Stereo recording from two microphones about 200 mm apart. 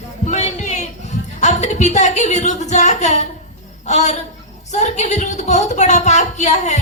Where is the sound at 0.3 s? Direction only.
35° left (ahead or behind).